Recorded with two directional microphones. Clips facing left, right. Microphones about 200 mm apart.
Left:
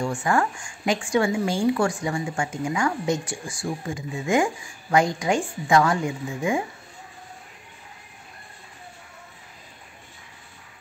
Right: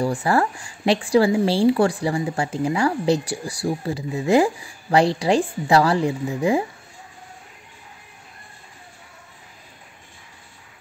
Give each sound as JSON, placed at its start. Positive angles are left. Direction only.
{"t": 0.0, "sound": "a woman's voice", "side_deg": -35}